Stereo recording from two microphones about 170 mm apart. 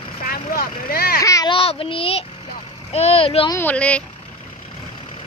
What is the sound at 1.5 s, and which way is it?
A child's voice, 35° left (ahead or behind).